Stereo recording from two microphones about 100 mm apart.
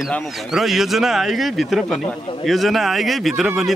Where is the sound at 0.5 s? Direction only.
5° right (ahead or behind).